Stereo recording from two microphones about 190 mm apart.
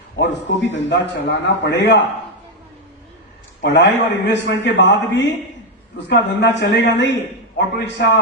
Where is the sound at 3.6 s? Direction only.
70° left (ahead or behind).